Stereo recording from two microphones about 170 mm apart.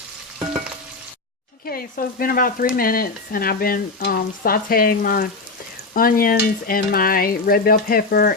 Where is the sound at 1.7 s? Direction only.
60° left (ahead or behind).